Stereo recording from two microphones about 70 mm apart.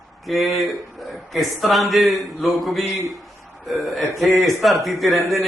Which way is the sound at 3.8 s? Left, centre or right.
Centre.